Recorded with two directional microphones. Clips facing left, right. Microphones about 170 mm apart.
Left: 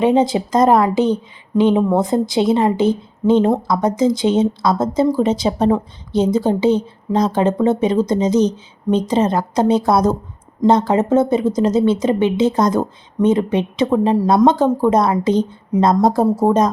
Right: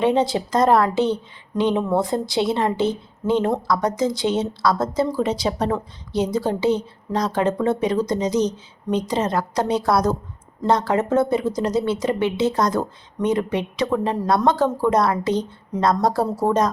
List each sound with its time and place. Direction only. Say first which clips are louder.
0.0 s speech: left 4 dB; 20° left (ahead or behind)